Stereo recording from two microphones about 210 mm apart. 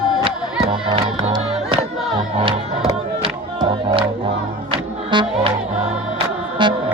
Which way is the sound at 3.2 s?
25° right (ahead or behind).